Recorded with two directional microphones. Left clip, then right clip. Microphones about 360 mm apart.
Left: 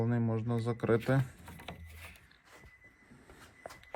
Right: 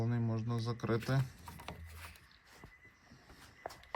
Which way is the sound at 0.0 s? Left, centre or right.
Left.